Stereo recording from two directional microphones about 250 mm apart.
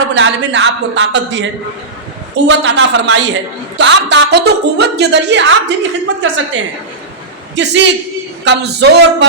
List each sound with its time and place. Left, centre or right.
0.1 s a woman's voice: right